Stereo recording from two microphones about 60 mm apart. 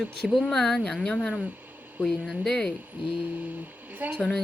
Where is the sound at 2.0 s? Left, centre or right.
Centre.